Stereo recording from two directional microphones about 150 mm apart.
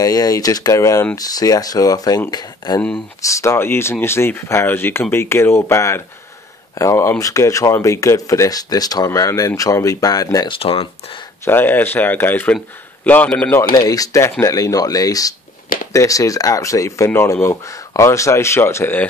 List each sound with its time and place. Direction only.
0.0 s speech: 25° left (ahead or behind)
10.6 s speech: 40° left (ahead or behind)
11.4 s speech: 15° left (ahead or behind)
13.7 s speech: 25° left (ahead or behind)